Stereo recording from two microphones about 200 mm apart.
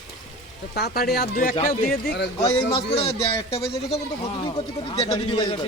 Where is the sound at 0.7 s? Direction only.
50° left (ahead or behind).